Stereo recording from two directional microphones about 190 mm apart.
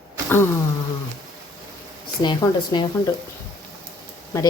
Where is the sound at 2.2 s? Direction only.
20° left (ahead or behind).